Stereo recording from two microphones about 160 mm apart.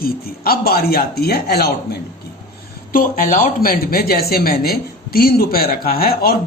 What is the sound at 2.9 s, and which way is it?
Speech, 60° left (ahead or behind).